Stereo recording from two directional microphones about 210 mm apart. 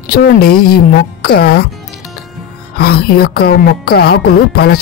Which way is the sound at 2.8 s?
45° left (ahead or behind).